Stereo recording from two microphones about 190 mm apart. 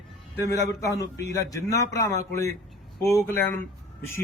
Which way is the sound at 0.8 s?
15° left (ahead or behind).